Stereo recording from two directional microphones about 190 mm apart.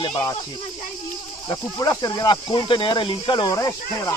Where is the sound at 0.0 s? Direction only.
20° left (ahead or behind).